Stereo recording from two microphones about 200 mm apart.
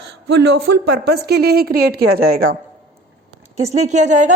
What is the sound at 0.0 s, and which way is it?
A woman's voice, 60° right (ahead or behind).